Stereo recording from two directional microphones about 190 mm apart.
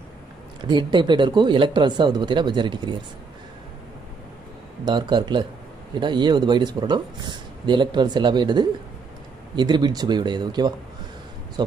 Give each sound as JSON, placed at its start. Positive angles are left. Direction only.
{"t": 0.7, "sound": "speech", "side_deg": -25}
{"t": 4.8, "sound": "speech", "side_deg": -25}